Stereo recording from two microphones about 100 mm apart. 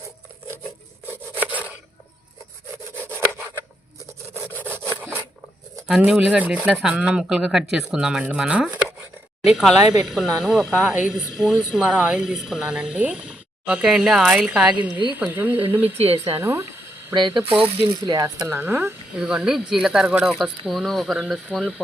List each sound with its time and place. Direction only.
1.4 s a sound: 15° right (ahead or behind)
2.9 s sawing: 20° right (ahead or behind)
4.5 s wood: 20° right (ahead or behind)
6.0 s speech: 10° right (ahead or behind)
16.0 s a woman's voice: 85° right
16.4 s speech: 25° right (ahead or behind)
17.2 s speech: 50° right (ahead or behind)
17.6 s speech: 65° right (ahead or behind)
18.0 s speech: 40° right (ahead or behind)
18.4 s speech: 25° right (ahead or behind)
19.1 s speech: 10° right (ahead or behind)